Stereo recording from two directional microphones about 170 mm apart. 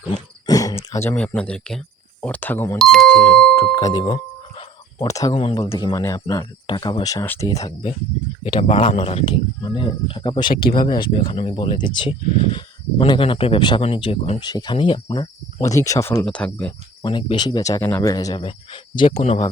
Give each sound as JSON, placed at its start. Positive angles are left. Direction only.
{"t": 0.4, "sound": "speech", "side_deg": 20}
{"t": 3.7, "sound": "music", "side_deg": 25}
{"t": 5.0, "sound": "speech", "side_deg": 20}
{"t": 5.3, "sound": "speech", "side_deg": 35}
{"t": 5.7, "sound": "speech", "side_deg": 20}
{"t": 8.8, "sound": "speech", "side_deg": 35}
{"t": 10.5, "sound": "speech", "side_deg": 55}
{"t": 10.8, "sound": "speech", "side_deg": 25}
{"t": 16.2, "sound": "speech", "side_deg": 5}
{"t": 17.0, "sound": "speech", "side_deg": 25}
{"t": 18.4, "sound": "speech", "side_deg": 30}